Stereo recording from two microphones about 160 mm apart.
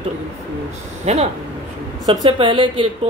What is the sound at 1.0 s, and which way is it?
Speech, 45° right (ahead or behind).